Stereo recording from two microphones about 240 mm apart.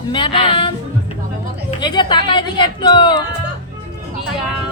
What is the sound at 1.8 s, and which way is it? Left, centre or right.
Speech, centre.